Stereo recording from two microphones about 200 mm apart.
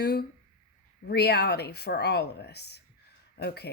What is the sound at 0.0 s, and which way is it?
Speech, 55° left (ahead or behind).